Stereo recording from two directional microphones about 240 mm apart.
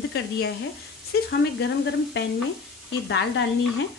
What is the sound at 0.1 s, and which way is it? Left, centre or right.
Speech, left.